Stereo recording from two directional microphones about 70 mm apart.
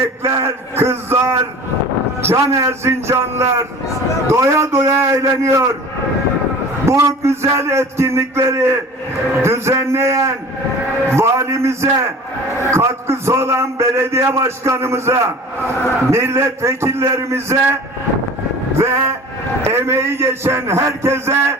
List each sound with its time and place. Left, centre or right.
0.2 s a sound: right
2.2 s a man's voice: right
6.8 s a man's voice: right
18.8 s a man's voice: right